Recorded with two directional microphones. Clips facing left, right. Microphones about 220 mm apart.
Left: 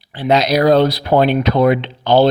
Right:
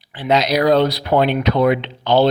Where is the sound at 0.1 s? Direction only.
35° left (ahead or behind).